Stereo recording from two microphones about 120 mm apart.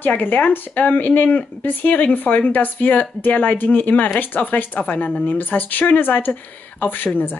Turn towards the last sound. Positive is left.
turn(degrees=15)  # may be behind; listen again after turning